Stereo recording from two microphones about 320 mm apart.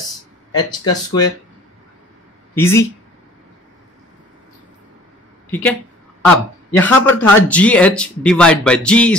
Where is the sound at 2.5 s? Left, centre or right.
Centre.